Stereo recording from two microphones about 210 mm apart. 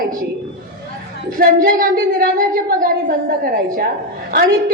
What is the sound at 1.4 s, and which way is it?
Speech, 40° right (ahead or behind).